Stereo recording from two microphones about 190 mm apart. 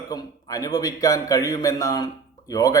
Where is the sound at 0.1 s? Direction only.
20° left (ahead or behind).